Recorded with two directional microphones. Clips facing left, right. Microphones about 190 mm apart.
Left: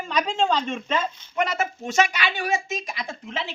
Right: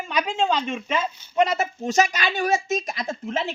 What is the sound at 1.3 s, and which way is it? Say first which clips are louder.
Speech: right 4 dB; 35° right (ahead or behind).